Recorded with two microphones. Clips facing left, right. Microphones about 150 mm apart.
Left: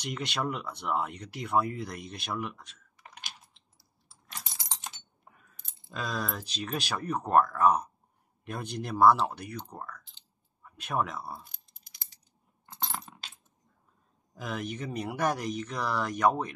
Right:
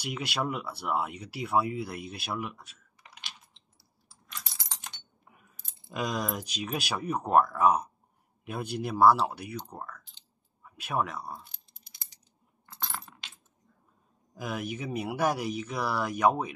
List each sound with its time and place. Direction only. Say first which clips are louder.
0.0 s speech: right 1 dB; 5° right (ahead or behind)
4.6 s typing: left 3 dB; 25° left (ahead or behind)
5.9 s speech: right 3 dB; 15° right (ahead or behind); by 11.4 s 5° left (ahead or behind)
12.6 s coin: left 2 dB; 20° left (ahead or behind)
14.3 s speech: right 1 dB; 10° right (ahead or behind)